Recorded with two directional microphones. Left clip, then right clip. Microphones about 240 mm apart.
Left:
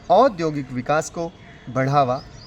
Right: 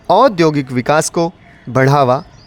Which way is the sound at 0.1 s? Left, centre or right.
Right.